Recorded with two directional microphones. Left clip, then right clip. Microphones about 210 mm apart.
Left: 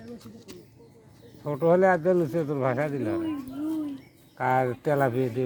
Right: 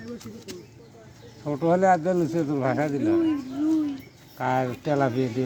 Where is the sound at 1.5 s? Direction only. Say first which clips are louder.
Right 1 dB; 40° left (ahead or behind).